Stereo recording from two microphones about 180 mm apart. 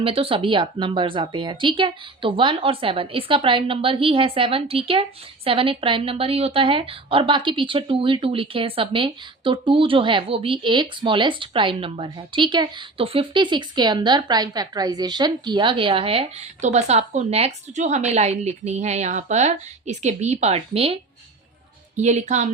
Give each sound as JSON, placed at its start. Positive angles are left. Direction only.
{"t": 0.0, "sound": "a woman's voice", "side_deg": -30}